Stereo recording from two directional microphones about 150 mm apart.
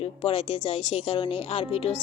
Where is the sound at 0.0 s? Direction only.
40° left (ahead or behind).